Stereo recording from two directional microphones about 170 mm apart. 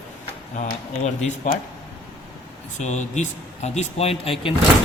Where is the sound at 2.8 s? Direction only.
45° left (ahead or behind).